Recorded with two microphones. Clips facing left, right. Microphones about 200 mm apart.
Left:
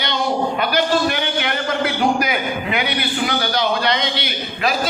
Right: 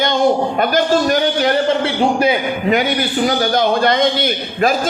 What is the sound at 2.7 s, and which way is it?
A man's voice, 45° right (ahead or behind).